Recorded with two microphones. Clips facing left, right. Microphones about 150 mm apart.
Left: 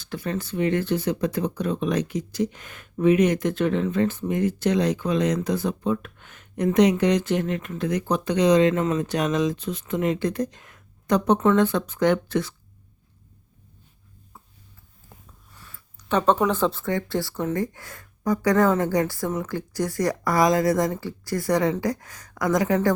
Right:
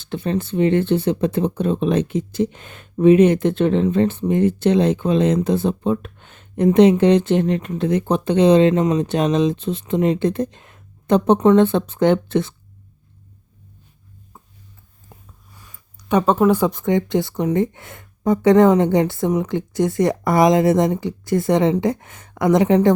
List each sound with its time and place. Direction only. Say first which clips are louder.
0.0 s speech: right 6 dB; 25° right (ahead or behind)
15.5 s speech: left 1 dB; 15° right (ahead or behind)